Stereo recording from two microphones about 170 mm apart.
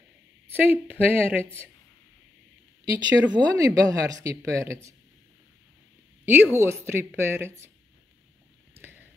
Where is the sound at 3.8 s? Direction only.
20° right (ahead or behind).